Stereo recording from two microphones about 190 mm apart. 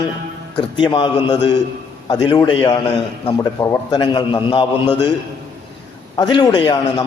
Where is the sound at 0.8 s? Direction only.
25° left (ahead or behind).